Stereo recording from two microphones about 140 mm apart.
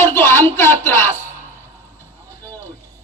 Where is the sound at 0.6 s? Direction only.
20° left (ahead or behind).